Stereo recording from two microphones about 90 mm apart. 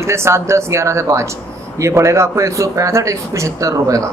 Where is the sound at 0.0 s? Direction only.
30° right (ahead or behind).